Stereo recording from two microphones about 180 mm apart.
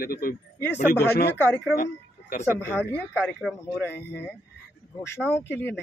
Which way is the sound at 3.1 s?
5° right (ahead or behind).